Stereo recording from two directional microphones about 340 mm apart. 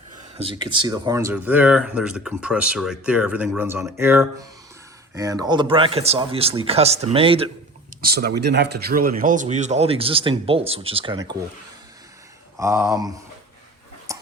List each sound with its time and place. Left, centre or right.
0.3 s speech: centre
8.0 s speech: right
12.5 s speech: centre
14.1 s dog: centre